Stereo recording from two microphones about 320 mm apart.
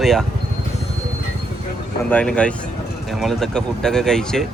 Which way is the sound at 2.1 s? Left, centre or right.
Centre.